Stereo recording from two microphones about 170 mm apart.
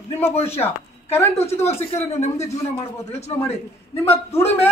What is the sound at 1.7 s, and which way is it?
Speech, 35° left (ahead or behind).